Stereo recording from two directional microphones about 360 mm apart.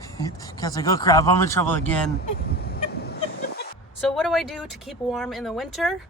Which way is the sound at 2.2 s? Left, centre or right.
Left.